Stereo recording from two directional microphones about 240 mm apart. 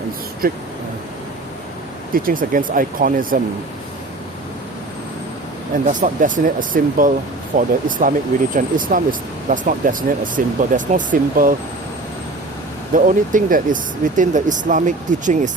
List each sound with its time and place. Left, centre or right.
0.4 s speech: right
2.1 s speech: right
5.7 s speech: right
12.9 s speech: right